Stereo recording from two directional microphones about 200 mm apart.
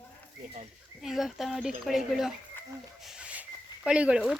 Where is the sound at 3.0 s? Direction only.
5° right (ahead or behind).